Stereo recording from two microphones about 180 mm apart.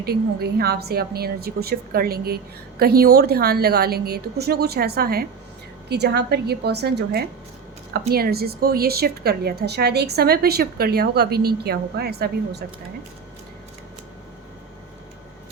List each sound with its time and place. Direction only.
0.0 s a woman's voice: 60° right (ahead or behind)